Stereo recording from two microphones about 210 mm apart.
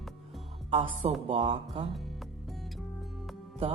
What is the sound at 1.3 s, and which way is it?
Music, 25° right (ahead or behind).